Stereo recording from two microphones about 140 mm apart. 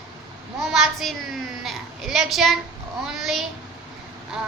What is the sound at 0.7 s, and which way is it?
A woman's voice, centre (ahead or behind).